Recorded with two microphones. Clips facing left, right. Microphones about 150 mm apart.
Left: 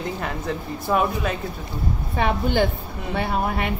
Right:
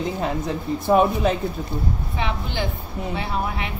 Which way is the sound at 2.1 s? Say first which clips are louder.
Left 8 dB; 50° left (ahead or behind).